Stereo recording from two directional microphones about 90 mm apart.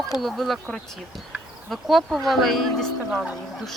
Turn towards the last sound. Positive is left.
turn(degrees=5)  # may be behind; listen again after turning